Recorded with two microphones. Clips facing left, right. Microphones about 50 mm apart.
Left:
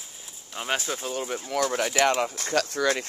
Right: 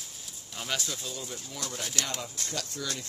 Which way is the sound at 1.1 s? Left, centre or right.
Left.